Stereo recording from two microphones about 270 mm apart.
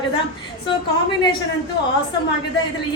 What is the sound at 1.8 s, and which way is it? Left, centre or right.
Speech, left.